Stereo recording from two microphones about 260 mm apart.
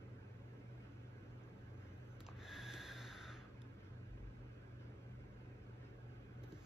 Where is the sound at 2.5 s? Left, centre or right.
Centre.